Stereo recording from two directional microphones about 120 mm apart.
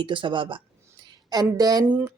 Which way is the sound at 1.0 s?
35° right (ahead or behind).